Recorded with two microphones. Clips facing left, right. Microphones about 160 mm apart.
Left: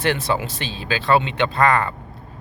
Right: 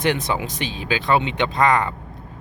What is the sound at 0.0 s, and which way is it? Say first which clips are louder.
Speech: even; 15° right (ahead or behind).